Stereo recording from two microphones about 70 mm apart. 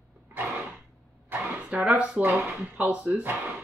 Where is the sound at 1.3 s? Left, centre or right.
Right.